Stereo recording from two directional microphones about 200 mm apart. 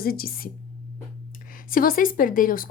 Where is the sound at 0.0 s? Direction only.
50° left (ahead or behind).